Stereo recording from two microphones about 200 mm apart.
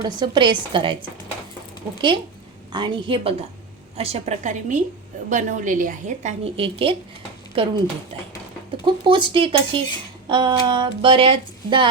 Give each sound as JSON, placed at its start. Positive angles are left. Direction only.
{"t": 0.0, "sound": "speech", "side_deg": -20}
{"t": 2.7, "sound": "a woman's voice", "side_deg": -25}
{"t": 8.8, "sound": "speech", "side_deg": -25}